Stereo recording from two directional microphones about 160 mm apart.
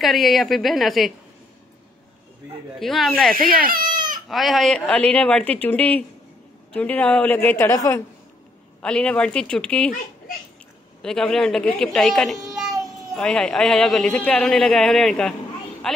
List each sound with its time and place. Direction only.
0.0 s speech: centre (ahead or behind)
2.8 s speech: centre (ahead or behind)
3.5 s speech: 60° right (ahead or behind)
4.3 s speech: centre (ahead or behind); by 8.0 s 15° left (ahead or behind)
8.8 s speech: 5° left (ahead or behind)
11.0 s a woman's voice: 5° left (ahead or behind)